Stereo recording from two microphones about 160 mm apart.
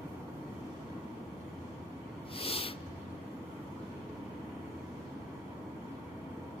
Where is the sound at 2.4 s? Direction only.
35° left (ahead or behind).